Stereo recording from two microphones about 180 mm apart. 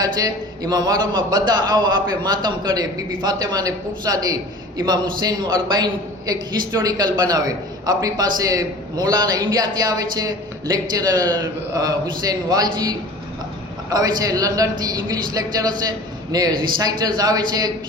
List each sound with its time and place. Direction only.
0.0 s a man's voice: 20° right (ahead or behind)
13.9 s a man's voice: 20° right (ahead or behind)